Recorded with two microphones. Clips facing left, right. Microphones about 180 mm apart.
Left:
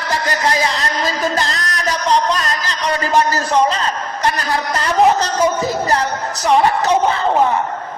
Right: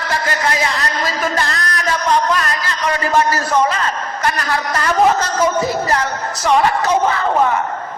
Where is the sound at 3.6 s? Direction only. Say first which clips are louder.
Left 3 dB; 30° left (ahead or behind).